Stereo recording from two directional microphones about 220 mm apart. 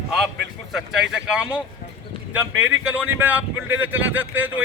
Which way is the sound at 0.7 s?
5° right (ahead or behind).